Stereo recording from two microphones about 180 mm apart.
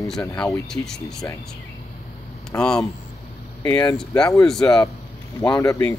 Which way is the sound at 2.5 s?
15° left (ahead or behind).